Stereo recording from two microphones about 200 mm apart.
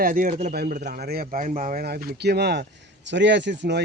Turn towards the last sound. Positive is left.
turn(degrees=-60)  # may be behind; listen again after turning